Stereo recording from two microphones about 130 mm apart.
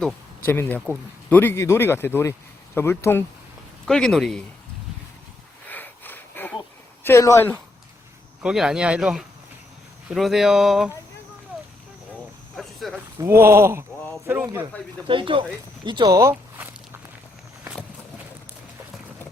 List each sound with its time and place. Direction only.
0.4 s speech: 15° left (ahead or behind)
3.8 s speech: 5° left (ahead or behind)
5.6 s a sound: 15° left (ahead or behind)
7.0 s speech: 20° left (ahead or behind)
8.4 s speech: 5° right (ahead or behind)
12.5 s a sound: centre (ahead or behind)
13.1 s speech: 20° right (ahead or behind)
15.0 s speech: 40° right (ahead or behind)
16.2 s walk: 15° right (ahead or behind)